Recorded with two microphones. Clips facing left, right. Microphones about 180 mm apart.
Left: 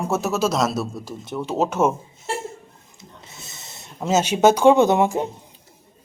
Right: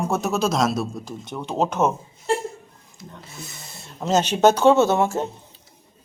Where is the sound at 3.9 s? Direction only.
10° left (ahead or behind).